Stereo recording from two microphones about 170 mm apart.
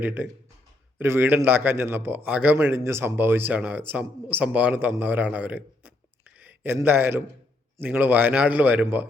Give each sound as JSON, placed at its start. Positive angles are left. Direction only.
{"t": 0.0, "sound": "a man's voice", "side_deg": -10}